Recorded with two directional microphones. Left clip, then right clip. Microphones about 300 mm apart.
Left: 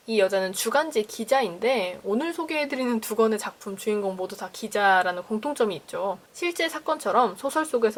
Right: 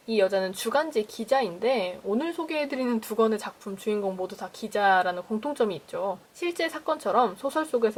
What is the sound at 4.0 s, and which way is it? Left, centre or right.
Speech, centre.